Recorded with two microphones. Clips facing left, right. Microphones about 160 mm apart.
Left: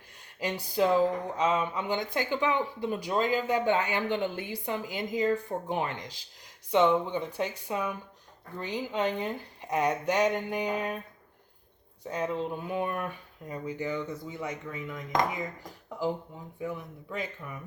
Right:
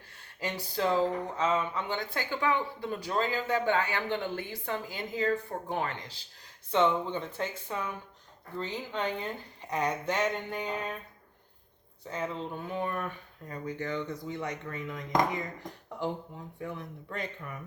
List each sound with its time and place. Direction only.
0.3 s speech: 15° left (ahead or behind)
12.0 s speech: 15° left (ahead or behind)